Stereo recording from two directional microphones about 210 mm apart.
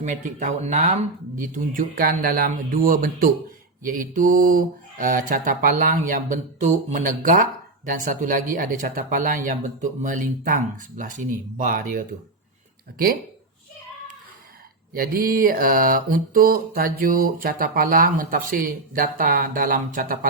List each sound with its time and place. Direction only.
0.0 s mantra: 35° right (ahead or behind)
14.9 s mantra: 45° right (ahead or behind)